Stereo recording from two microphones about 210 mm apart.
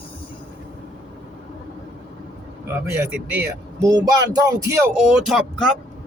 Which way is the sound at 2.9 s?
10° right (ahead or behind).